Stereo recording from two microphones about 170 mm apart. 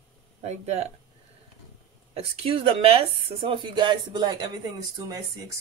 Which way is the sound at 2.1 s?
35° right (ahead or behind).